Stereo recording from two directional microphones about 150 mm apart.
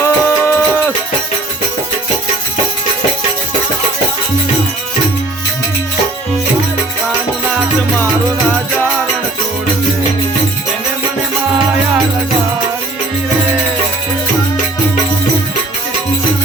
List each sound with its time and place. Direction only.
0.0 s music: 15° left (ahead or behind)